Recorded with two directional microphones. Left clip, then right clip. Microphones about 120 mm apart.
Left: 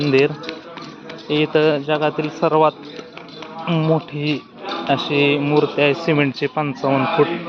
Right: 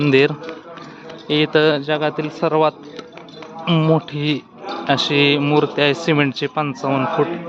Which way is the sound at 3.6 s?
50° right (ahead or behind).